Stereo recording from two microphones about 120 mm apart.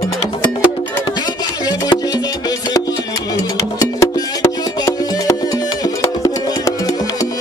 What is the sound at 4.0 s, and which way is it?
Music, 25° left (ahead or behind).